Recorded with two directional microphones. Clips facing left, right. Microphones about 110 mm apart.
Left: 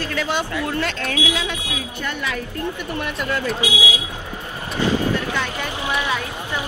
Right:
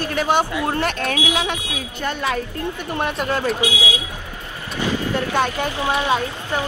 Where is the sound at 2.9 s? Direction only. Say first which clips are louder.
Right 5 dB; 30° right (ahead or behind).